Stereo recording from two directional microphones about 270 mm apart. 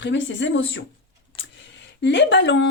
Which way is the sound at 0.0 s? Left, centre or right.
Left.